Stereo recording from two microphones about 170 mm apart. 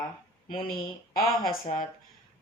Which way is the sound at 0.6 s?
55° left (ahead or behind).